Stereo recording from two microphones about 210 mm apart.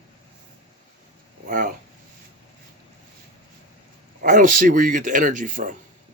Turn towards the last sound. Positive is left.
turn(degrees=-40)  # may be behind; listen again after turning